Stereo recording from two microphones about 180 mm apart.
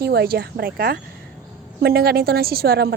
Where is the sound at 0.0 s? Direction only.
60° right (ahead or behind).